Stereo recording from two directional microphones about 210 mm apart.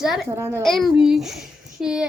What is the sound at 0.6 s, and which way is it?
A woman's voice, centre (ahead or behind).